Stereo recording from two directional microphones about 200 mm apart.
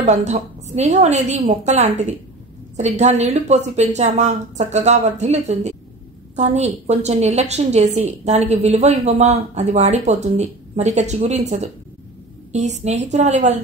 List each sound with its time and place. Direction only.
0.0 s a woman's voice: 35° right (ahead or behind)